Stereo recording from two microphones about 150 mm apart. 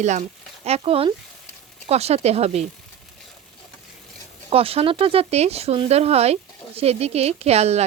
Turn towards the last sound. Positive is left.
turn(degrees=-45)  # may be behind; listen again after turning